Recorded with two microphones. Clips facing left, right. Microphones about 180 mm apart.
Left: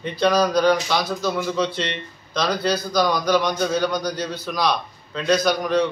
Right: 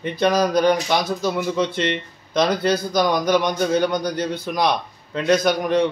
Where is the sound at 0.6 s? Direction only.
20° right (ahead or behind).